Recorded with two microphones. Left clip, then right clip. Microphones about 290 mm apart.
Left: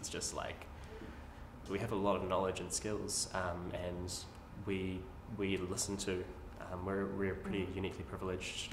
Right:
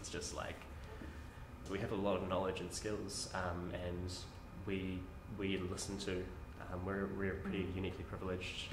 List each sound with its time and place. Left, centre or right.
1.7 s speech: right